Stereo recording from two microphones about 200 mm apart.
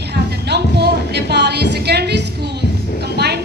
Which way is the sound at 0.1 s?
55° right (ahead or behind).